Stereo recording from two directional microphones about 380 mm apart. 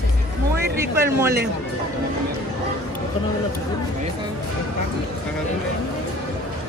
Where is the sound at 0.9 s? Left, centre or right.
Centre.